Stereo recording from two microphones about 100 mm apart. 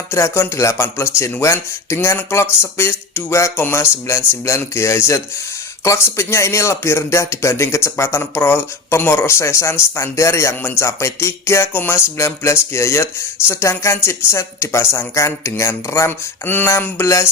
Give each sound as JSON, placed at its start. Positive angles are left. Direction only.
{"t": 0.1, "sound": "speech", "side_deg": 30}